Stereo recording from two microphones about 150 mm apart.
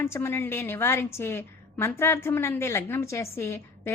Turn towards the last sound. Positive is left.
turn(degrees=15)  # may be behind; listen again after turning